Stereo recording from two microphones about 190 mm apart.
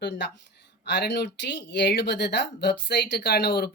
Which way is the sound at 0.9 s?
65° left (ahead or behind).